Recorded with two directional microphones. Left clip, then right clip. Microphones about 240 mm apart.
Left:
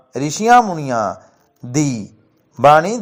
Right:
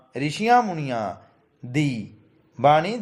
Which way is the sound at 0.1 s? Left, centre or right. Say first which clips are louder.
Left 7 dB; centre.